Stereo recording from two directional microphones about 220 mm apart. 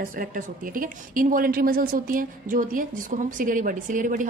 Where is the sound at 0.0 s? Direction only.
40° right (ahead or behind).